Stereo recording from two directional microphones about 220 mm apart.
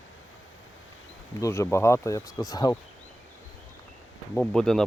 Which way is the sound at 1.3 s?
15° left (ahead or behind).